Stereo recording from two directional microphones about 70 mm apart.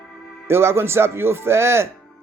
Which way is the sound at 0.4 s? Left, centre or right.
Right.